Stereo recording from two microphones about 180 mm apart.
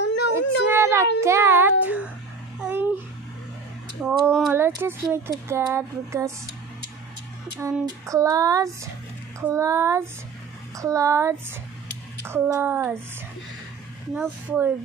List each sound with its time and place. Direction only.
0.0 s a sound: 70° left (ahead or behind)
0.3 s a sound: 15° right (ahead or behind)
1.2 s speech: 15° right (ahead or behind)
2.6 s babbling: 10° right (ahead or behind)
4.0 s speech: centre (ahead or behind)
4.5 s speech: 15° right (ahead or behind)
8.1 s speech: 20° right (ahead or behind)
14.2 s speech: 10° right (ahead or behind)